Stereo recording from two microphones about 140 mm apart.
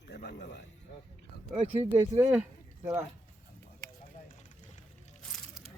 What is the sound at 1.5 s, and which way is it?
Speech, 40° right (ahead or behind).